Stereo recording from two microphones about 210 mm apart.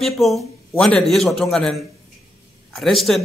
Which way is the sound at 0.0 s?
Centre (ahead or behind).